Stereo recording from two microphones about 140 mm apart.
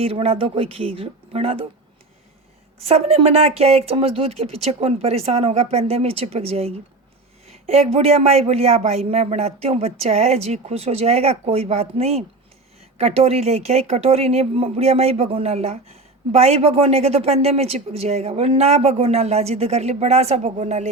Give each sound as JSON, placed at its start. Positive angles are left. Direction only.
{"t": 0.0, "sound": "speech", "side_deg": -45}
{"t": 2.7, "sound": "speech", "side_deg": -45}